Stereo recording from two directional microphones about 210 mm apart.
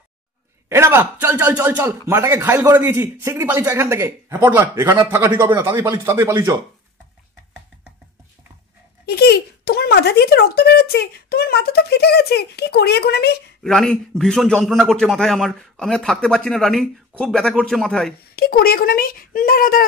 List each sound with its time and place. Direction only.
0.7 s a man's voice: 10° right (ahead or behind)
9.0 s speech: 50° left (ahead or behind)
13.6 s a man's voice: centre (ahead or behind)
18.3 s speech: 45° left (ahead or behind)